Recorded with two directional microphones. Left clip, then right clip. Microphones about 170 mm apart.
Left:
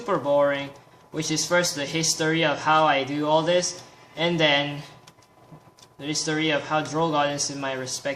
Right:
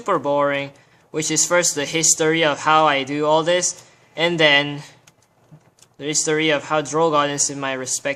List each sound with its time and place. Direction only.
0.0 s speech: 40° right (ahead or behind)
6.0 s speech: 40° right (ahead or behind)